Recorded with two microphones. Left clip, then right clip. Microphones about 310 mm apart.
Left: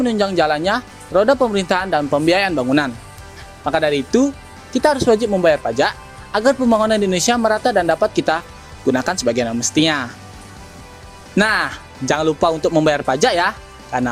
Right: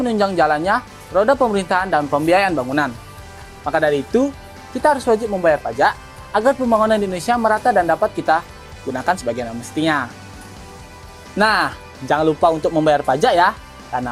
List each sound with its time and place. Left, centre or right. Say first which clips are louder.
0.1 s speech: right 3 dB; left
7.1 s speech: left 1 dB; left
11.3 s speech: right 1 dB; left